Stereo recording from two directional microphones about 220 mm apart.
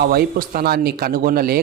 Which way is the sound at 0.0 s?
45° right (ahead or behind).